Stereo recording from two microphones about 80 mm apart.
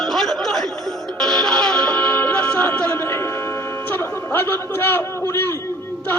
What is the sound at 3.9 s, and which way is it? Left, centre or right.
A man's voice, left.